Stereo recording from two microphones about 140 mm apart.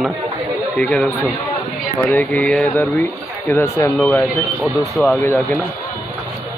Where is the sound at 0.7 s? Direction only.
10° left (ahead or behind).